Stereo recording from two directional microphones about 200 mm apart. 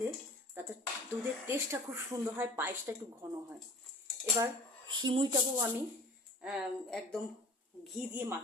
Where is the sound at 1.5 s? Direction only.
15° right (ahead or behind).